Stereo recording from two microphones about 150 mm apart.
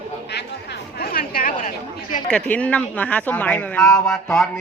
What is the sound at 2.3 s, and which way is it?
A man's voice, 10° left (ahead or behind).